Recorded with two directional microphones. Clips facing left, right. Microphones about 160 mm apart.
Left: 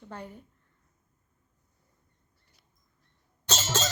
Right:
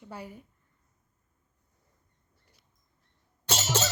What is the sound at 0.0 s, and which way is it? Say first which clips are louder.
Speech: even; 10° right (ahead or behind).